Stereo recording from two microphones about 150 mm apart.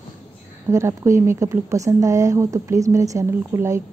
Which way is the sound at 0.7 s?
20° right (ahead or behind).